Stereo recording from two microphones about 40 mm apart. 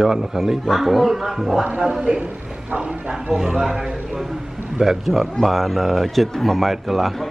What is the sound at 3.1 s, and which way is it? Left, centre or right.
A man's voice, centre.